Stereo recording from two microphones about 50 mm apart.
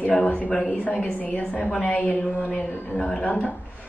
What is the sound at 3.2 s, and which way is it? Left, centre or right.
Speech, left.